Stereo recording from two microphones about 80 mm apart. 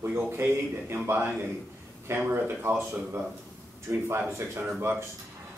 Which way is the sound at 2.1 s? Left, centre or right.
Right.